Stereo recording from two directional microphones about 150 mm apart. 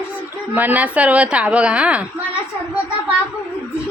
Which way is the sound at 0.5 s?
10° right (ahead or behind).